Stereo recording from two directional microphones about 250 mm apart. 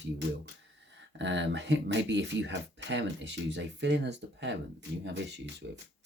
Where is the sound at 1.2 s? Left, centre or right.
Right.